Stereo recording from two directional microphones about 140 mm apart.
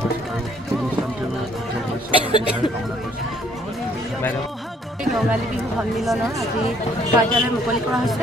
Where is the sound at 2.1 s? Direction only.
35° left (ahead or behind).